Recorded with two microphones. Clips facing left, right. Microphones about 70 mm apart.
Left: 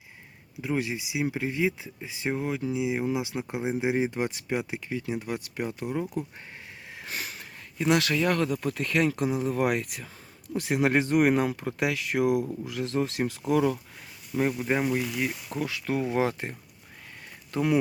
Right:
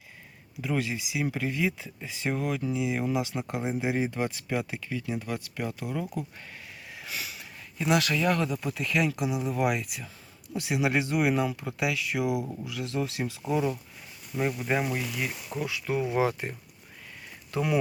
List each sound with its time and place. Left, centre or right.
0.6 s speech: centre
6.9 s a sound: left
8.6 s speech: left
13.5 s speech: left
14.6 s speech: centre
15.6 s speech: left